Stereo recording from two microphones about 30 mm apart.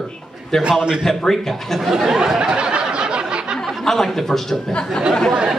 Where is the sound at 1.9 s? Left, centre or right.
Centre.